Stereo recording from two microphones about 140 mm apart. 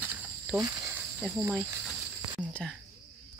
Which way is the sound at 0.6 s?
25° right (ahead or behind).